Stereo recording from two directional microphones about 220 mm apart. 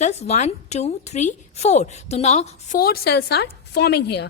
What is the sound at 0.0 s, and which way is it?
A woman's voice, 30° left (ahead or behind).